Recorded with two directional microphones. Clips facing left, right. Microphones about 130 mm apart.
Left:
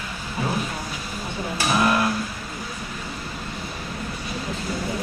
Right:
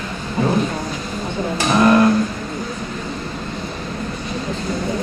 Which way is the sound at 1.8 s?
45° right (ahead or behind).